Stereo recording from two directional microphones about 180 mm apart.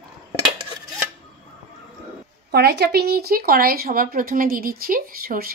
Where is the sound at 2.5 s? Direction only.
65° right (ahead or behind).